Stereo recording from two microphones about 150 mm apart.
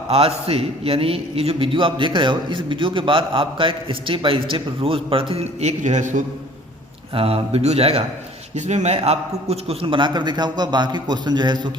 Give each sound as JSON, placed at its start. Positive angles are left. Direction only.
{"t": 0.1, "sound": "a man's voice", "side_deg": -40}
{"t": 7.1, "sound": "a man's voice", "side_deg": -40}